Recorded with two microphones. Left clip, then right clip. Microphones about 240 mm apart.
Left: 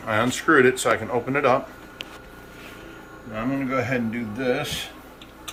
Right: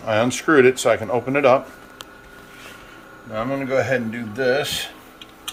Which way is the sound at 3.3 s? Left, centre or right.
Right.